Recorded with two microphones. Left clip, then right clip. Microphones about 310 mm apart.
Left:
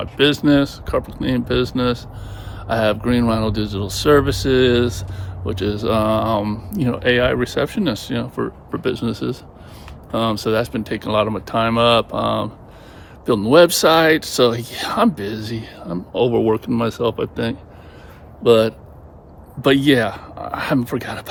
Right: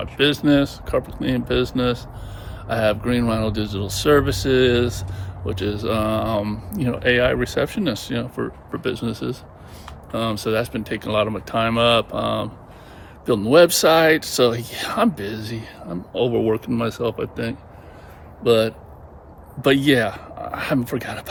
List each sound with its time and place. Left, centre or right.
0.0 s speech: centre